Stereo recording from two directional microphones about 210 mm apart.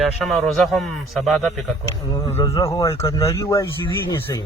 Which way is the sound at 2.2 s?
15° left (ahead or behind).